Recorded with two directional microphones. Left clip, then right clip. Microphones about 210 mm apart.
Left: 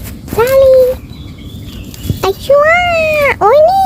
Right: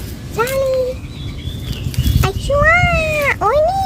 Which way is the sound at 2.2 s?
35° left (ahead or behind).